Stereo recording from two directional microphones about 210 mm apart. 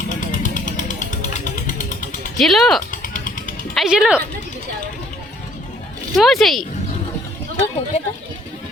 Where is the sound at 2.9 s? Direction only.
40° left (ahead or behind).